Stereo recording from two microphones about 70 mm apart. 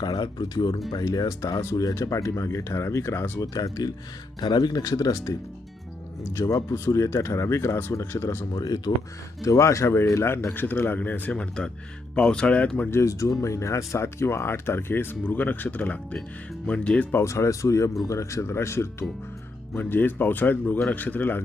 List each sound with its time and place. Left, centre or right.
0.0 s speech: left
3.4 s speech: left
4.4 s speech: left
8.5 s speech: left
9.4 s speech: left; by 12.9 s centre
12.9 s speech: left; by 17.1 s centre
17.2 s speech: left
19.7 s speech: left